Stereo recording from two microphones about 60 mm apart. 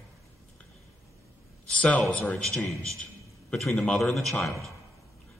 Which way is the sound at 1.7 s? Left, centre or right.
Left.